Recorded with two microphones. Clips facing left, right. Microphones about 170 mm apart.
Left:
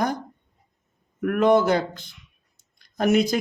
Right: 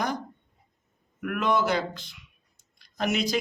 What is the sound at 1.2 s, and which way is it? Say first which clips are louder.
Speech: left 7 dB; 45° left (ahead or behind).